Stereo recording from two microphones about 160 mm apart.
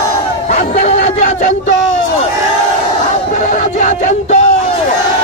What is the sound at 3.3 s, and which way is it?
Music, 50° left (ahead or behind).